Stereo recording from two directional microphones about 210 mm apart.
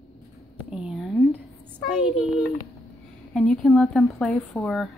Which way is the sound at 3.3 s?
5° left (ahead or behind).